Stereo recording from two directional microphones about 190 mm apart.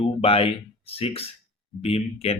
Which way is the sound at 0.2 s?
30° left (ahead or behind).